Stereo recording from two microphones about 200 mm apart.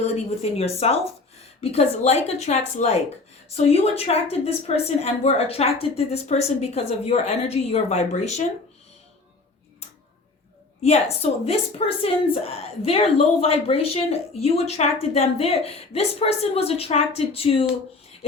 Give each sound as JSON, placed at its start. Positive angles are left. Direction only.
{"t": 0.0, "sound": "a woman's voice", "side_deg": 35}
{"t": 10.8, "sound": "a woman's voice", "side_deg": 30}